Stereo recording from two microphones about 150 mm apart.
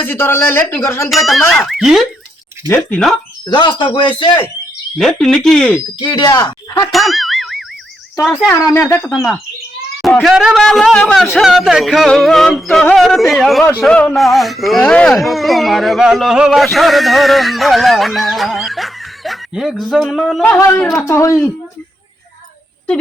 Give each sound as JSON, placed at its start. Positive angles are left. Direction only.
{"t": 0.0, "sound": "speech", "side_deg": 15}
{"t": 1.1, "sound": "speech", "side_deg": 0}
{"t": 3.4, "sound": "speech", "side_deg": 30}
{"t": 4.9, "sound": "speech", "side_deg": 5}
{"t": 6.0, "sound": "speech", "side_deg": 30}
{"t": 6.9, "sound": "music", "side_deg": 0}
{"t": 8.4, "sound": "speech", "side_deg": 15}
{"t": 10.2, "sound": "speech", "side_deg": 0}
{"t": 21.1, "sound": "speech", "side_deg": 20}